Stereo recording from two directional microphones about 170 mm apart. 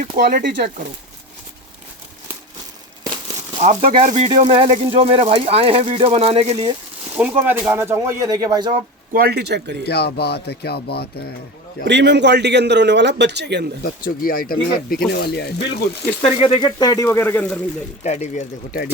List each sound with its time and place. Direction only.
0.0 s speech: 55° right (ahead or behind); by 0.7 s 80° right
3.6 s speech: 40° right (ahead or behind)
4.3 s speech: 30° right (ahead or behind)
7.2 s speech: 10° right (ahead or behind)
9.1 s speech: 70° right (ahead or behind)
9.8 s speech: 70° left (ahead or behind)
11.9 s speech: 90° right
14.0 s speech: 60° left (ahead or behind)
15.2 s speech: 70° left (ahead or behind)
16.2 s speech: 35° left (ahead or behind); by 17.6 s 10° left (ahead or behind)
18.0 s speech: 45° left (ahead or behind)